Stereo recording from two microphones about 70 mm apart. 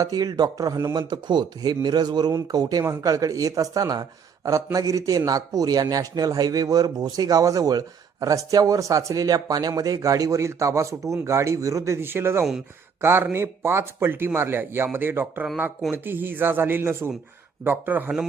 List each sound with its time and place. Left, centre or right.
0.0 s speech: right
0.9 s speech: right
3.0 s a man's voice: right
4.4 s a man's voice: right
11.9 s a man's voice: right